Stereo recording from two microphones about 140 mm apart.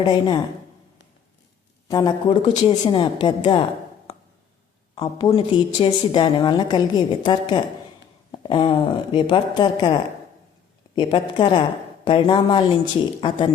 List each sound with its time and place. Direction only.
0.0 s speech: 30° left (ahead or behind)
1.9 s speech: 30° left (ahead or behind)
4.9 s speech: 35° left (ahead or behind)